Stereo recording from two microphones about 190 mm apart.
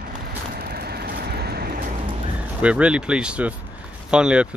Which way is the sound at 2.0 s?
30° right (ahead or behind).